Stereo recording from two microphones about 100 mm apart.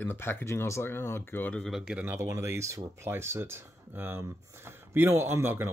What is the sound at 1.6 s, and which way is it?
Speech, 5° right (ahead or behind).